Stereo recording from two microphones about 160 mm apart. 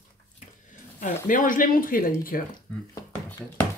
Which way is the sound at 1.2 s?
55° left (ahead or behind).